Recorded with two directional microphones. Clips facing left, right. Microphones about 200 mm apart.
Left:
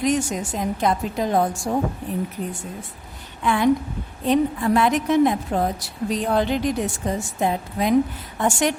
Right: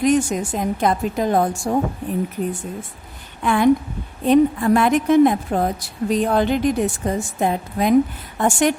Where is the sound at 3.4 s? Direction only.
50° right (ahead or behind).